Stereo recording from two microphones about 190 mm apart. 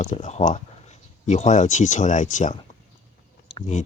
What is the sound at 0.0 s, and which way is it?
Speech, 35° left (ahead or behind).